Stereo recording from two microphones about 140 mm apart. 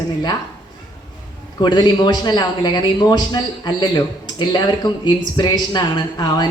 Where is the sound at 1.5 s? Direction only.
30° left (ahead or behind).